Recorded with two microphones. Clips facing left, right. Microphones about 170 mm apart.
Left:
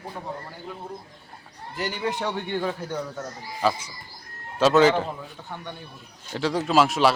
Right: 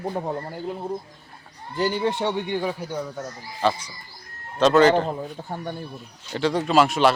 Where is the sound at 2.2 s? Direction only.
20° right (ahead or behind).